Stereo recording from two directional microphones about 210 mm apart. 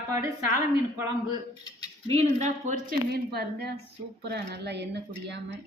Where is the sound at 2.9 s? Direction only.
50° right (ahead or behind).